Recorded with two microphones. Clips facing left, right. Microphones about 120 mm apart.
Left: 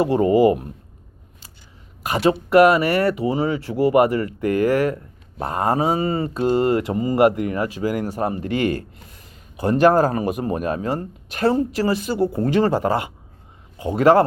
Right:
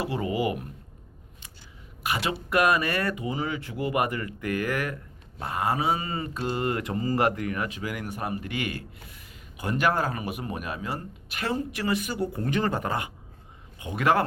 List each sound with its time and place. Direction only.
0.0 s speech: 40° left (ahead or behind)
2.0 s speech: 40° left (ahead or behind)
5.4 s speech: 40° left (ahead or behind)